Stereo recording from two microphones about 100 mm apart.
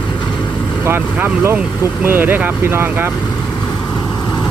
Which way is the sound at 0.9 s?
20° right (ahead or behind).